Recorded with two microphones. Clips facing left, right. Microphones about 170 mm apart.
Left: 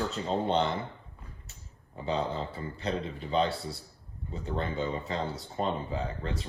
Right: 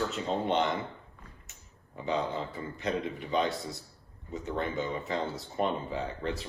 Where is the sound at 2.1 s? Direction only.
35° left (ahead or behind).